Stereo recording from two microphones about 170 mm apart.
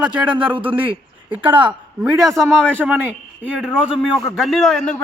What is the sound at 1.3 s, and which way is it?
Speech, 10° right (ahead or behind).